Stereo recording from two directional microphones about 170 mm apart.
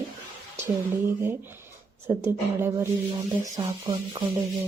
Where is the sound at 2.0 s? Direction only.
15° right (ahead or behind).